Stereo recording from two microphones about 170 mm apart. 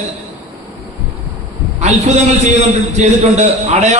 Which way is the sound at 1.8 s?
40° right (ahead or behind).